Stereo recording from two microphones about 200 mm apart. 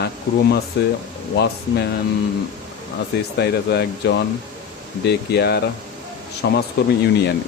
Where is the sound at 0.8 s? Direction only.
60° left (ahead or behind).